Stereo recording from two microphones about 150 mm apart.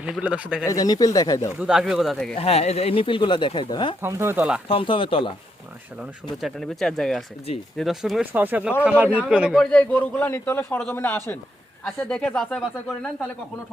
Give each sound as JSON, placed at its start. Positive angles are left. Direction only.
{"t": 0.0, "sound": "speech", "side_deg": -10}
{"t": 0.7, "sound": "speech", "side_deg": 25}
{"t": 1.5, "sound": "speech", "side_deg": -5}
{"t": 2.4, "sound": "speech", "side_deg": 45}
{"t": 4.0, "sound": "speech", "side_deg": -15}
{"t": 4.7, "sound": "speech", "side_deg": 35}
{"t": 6.4, "sound": "speech", "side_deg": 0}
{"t": 8.3, "sound": "a man's voice", "side_deg": -10}
{"t": 12.0, "sound": "speech", "side_deg": 5}